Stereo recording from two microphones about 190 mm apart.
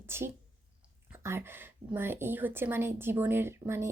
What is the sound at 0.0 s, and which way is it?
A woman's voice, 15° right (ahead or behind).